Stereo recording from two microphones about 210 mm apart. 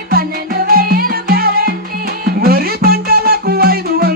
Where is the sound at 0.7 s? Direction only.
45° right (ahead or behind).